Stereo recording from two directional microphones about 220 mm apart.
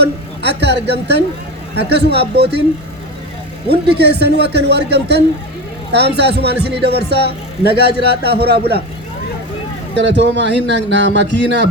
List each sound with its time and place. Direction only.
0.0 s speech: 50° right (ahead or behind)
3.7 s speech: 50° right (ahead or behind)
9.9 s speech: 50° right (ahead or behind)